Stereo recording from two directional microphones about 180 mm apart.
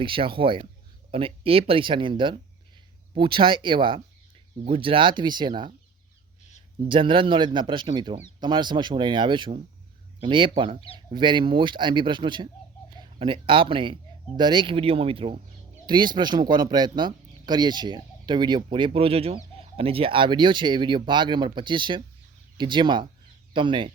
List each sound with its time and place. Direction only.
0.0 s speech: 30° right (ahead or behind)
6.8 s speech: 30° right (ahead or behind)
10.8 s speech: 30° left (ahead or behind)
11.1 s speech: 25° right (ahead or behind)